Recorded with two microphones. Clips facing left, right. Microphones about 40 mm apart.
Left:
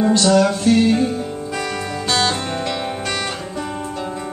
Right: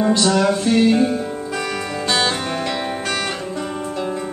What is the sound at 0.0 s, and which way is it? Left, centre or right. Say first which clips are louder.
Music: left 2 dB; centre.